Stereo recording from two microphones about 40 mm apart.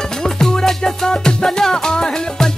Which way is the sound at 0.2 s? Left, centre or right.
Centre.